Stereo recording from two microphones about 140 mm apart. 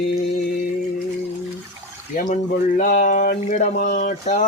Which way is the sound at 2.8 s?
80° left.